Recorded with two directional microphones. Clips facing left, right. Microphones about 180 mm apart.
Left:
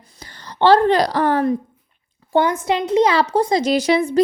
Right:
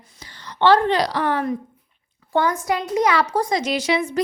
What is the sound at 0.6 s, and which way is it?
Speech, 35° left (ahead or behind).